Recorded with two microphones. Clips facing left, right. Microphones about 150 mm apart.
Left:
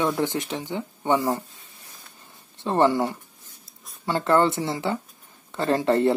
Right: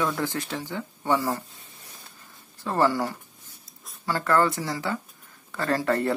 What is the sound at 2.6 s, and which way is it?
Speech, 20° left (ahead or behind).